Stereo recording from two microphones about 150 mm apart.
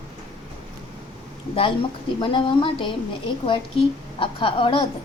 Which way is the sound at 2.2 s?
35° left (ahead or behind).